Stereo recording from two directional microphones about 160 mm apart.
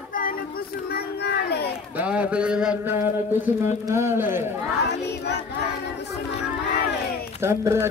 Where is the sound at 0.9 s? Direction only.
90° left.